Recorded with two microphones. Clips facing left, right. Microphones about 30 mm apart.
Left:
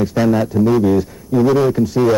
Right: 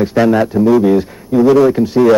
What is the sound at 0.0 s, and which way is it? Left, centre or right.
A man's voice, right.